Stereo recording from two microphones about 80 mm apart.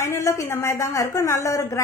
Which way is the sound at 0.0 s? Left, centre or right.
Left.